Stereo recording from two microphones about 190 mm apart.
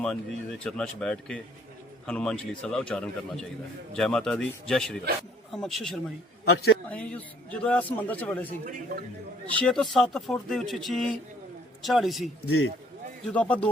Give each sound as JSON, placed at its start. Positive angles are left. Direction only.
{"t": 0.0, "sound": "speech", "side_deg": 5}
{"t": 6.4, "sound": "a man's voice", "side_deg": 55}
{"t": 6.8, "sound": "a man's voice", "side_deg": 5}
{"t": 9.5, "sound": "a man's voice", "side_deg": 5}